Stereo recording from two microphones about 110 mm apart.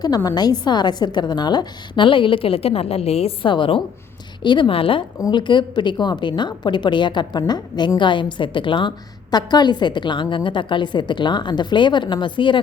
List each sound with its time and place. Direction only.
0.2 s a woman's voice: 35° left (ahead or behind)